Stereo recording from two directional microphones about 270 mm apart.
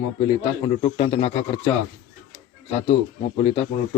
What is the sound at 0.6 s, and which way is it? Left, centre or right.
Speech, left.